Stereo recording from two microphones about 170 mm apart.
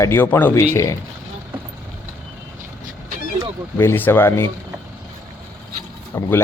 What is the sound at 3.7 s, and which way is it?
Speech, 10° left (ahead or behind).